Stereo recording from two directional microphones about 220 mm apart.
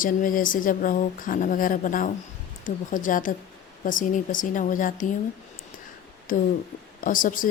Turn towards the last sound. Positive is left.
turn(degrees=40)  # may be behind; listen again after turning